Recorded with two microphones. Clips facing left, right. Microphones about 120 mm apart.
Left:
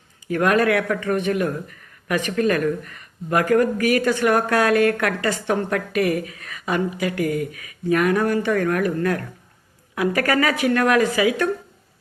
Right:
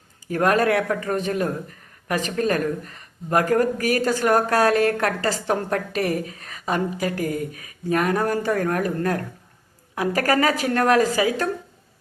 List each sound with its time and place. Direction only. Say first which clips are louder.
0.3 s speech: left 1 dB; 35° right (ahead or behind)